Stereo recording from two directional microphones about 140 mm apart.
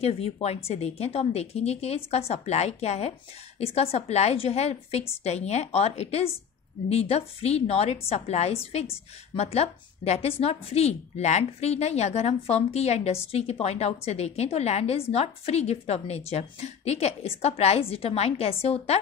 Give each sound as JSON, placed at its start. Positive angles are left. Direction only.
{"t": 0.0, "sound": "a woman's voice", "side_deg": 45}